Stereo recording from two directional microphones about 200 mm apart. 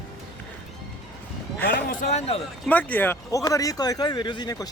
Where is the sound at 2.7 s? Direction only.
10° left (ahead or behind).